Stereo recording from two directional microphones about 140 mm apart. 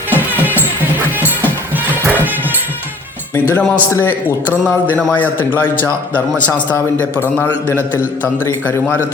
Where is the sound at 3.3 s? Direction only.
15° left (ahead or behind).